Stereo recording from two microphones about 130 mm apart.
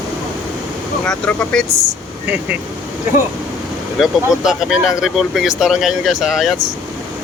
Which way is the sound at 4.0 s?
5° right (ahead or behind).